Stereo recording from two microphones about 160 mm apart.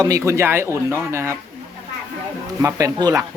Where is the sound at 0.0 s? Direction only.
20° right (ahead or behind).